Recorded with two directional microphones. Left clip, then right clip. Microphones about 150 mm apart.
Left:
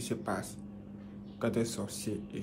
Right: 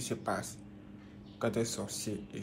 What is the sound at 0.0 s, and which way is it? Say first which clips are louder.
Speech: even; 15° left (ahead or behind).